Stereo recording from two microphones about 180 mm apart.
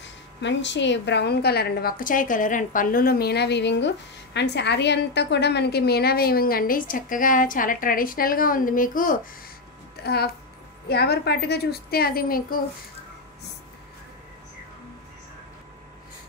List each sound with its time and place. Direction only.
0.0 s a woman's voice: 85° left; by 9.3 s 50° left (ahead or behind)
10.0 s a woman's voice: 60° left (ahead or behind)